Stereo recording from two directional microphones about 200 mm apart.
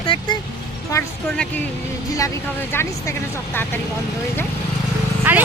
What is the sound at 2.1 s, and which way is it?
Speech, 15° left (ahead or behind).